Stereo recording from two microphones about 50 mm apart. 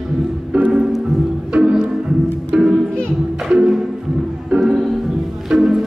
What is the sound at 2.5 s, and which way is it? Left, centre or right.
Music, right.